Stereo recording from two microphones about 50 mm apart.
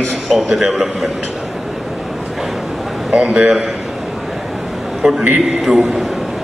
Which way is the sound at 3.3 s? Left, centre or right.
Centre.